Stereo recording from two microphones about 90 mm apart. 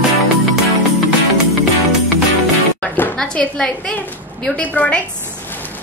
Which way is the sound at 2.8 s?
20° left (ahead or behind).